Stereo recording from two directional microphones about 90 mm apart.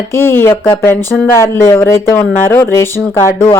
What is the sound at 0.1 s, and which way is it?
Speech, 25° left (ahead or behind).